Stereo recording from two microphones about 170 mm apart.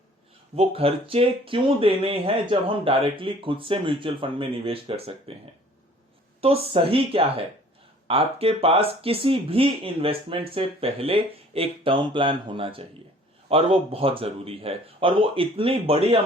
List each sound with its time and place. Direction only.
0.5 s speech: 35° right (ahead or behind)
6.4 s speech: 35° right (ahead or behind)